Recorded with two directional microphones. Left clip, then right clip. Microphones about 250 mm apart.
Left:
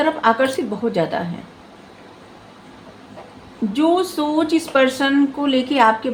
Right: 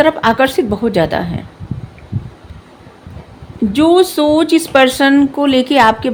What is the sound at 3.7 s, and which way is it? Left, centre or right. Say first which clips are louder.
Speech: right 7 dB; right.